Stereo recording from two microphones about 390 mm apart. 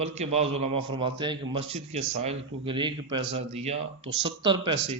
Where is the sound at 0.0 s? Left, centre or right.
Centre.